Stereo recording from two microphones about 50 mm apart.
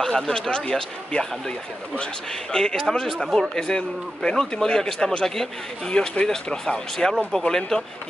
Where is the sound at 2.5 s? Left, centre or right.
Centre.